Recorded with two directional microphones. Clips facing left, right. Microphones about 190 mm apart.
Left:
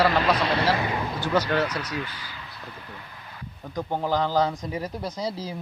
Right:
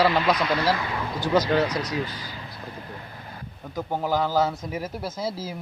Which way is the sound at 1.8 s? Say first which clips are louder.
Right 3 dB; 35° right (ahead or behind).